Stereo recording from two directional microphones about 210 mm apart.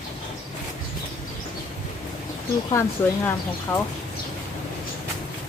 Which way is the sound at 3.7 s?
10° left (ahead or behind).